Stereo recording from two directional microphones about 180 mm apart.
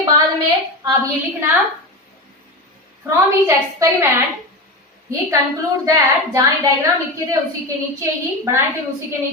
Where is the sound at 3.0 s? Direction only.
15° right (ahead or behind).